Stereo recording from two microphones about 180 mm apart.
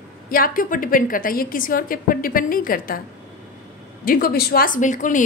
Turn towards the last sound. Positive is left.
turn(degrees=45)  # may be behind; listen again after turning